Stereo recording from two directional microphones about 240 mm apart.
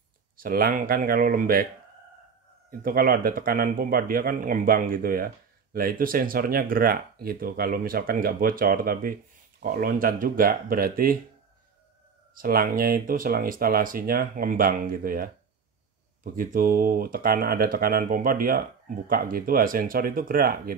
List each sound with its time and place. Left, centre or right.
0.4 s speech: right
2.8 s speech: right
12.4 s speech: right
16.3 s speech: right